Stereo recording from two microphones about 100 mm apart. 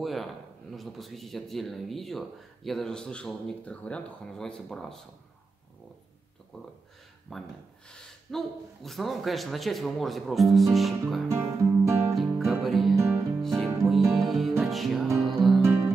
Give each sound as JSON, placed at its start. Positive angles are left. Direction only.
{"t": 0.0, "sound": "speech", "side_deg": 0}
{"t": 6.5, "sound": "speech", "side_deg": 0}
{"t": 11.2, "sound": "music", "side_deg": -25}
{"t": 12.4, "sound": "music", "side_deg": 0}
{"t": 12.9, "sound": "music", "side_deg": -25}
{"t": 13.4, "sound": "music", "side_deg": 0}
{"t": 15.6, "sound": "music", "side_deg": -25}